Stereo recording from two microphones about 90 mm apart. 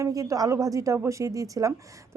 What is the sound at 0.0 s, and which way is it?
A woman's voice, 40° right (ahead or behind).